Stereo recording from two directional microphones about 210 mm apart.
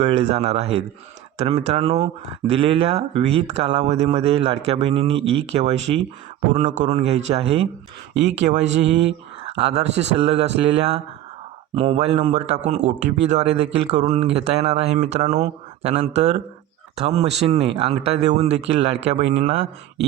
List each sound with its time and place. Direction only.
0.0 s speech: 30° right (ahead or behind)